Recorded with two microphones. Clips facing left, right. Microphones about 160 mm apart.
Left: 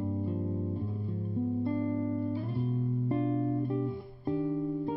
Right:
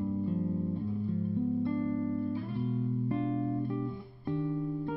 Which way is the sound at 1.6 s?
35° left (ahead or behind).